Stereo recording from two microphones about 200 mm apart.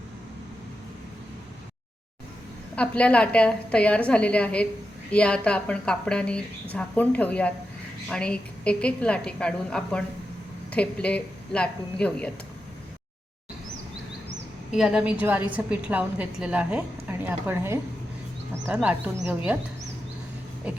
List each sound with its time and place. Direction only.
2.7 s speech: 5° left (ahead or behind)
14.8 s a woman's voice: 5° right (ahead or behind)